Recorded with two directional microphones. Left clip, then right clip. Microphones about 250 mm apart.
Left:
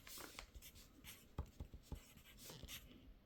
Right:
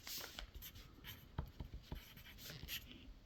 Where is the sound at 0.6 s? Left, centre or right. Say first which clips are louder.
Right 5 dB; centre.